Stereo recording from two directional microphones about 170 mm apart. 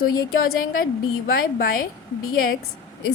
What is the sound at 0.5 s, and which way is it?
A woman's voice, 55° left (ahead or behind).